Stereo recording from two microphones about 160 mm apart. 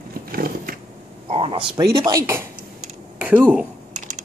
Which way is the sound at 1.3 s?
35° right (ahead or behind).